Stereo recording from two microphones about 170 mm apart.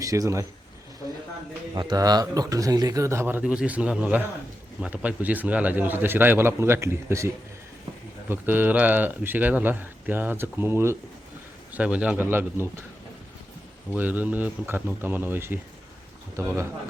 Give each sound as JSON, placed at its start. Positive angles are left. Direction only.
{"t": 0.0, "sound": "speech", "side_deg": -20}
{"t": 1.7, "sound": "speech", "side_deg": -25}
{"t": 13.9, "sound": "speech", "side_deg": -10}